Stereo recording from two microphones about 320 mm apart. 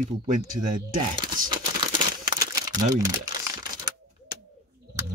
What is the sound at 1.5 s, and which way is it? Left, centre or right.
Crumpling, centre.